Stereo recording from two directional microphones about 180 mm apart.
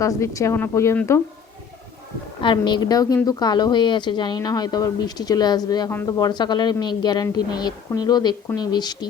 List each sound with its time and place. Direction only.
0.0 s speech: 15° left (ahead or behind)
2.4 s a woman's voice: 25° left (ahead or behind)